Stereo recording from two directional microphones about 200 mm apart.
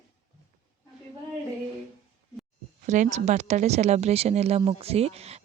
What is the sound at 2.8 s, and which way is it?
Speech, 35° right (ahead or behind).